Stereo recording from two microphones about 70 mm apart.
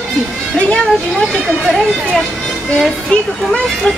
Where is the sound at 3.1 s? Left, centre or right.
Centre.